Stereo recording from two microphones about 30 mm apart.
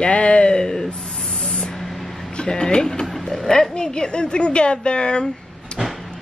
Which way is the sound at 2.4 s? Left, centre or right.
Left.